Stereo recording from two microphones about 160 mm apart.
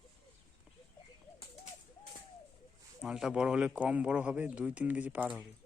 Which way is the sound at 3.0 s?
5° right (ahead or behind).